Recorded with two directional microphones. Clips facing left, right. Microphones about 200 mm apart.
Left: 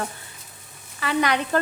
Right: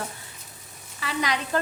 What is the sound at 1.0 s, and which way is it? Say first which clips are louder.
Speech: left 5 dB; 60° left (ahead or behind).